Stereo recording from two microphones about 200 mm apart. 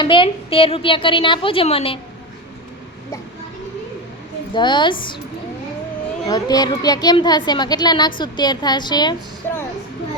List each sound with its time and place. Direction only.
0.0 s a child's voice: 25° left (ahead or behind)
4.5 s a child's voice: 25° left (ahead or behind)
6.2 s a child's voice: 20° left (ahead or behind)
9.4 s a sound: 10° left (ahead or behind)